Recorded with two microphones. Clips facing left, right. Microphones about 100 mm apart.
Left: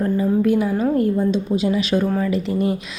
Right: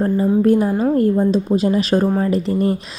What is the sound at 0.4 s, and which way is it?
A woman's voice, 40° right (ahead or behind).